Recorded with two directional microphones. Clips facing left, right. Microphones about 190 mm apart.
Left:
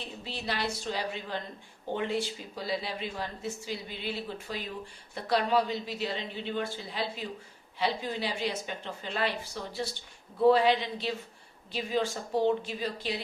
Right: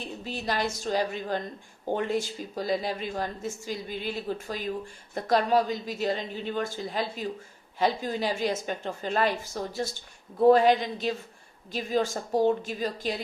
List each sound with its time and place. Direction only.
0.0 s a woman's voice: 45° right (ahead or behind)